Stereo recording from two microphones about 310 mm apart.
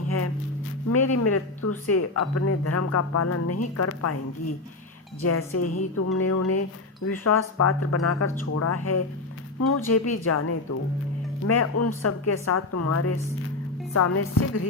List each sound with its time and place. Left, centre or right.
0.9 s speech: left